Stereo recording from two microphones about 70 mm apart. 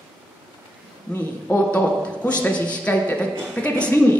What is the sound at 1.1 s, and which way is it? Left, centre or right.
A man's voice, left.